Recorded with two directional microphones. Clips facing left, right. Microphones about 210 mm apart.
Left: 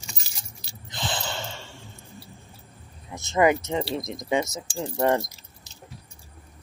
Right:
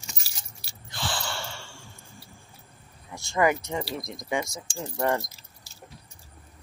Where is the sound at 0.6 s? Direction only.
20° left (ahead or behind).